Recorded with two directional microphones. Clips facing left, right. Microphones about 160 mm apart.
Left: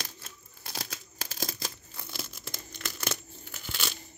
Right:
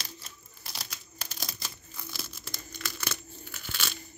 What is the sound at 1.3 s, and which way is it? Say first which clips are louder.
Tearing: left 6 dB; 45° left (ahead or behind).